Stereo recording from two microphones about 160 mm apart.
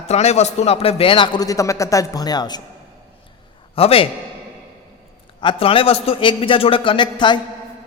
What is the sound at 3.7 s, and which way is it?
Speech, 35° left (ahead or behind).